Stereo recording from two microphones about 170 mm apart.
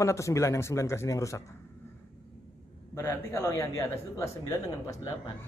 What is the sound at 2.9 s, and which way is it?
A man's voice, 15° left (ahead or behind).